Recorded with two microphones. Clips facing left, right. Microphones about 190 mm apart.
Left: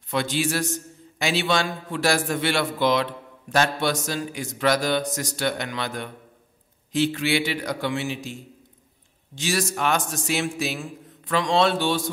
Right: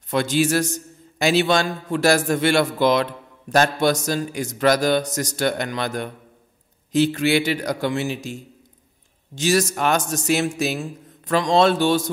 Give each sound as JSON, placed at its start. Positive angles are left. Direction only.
{"t": 0.1, "sound": "a man's voice", "side_deg": -45}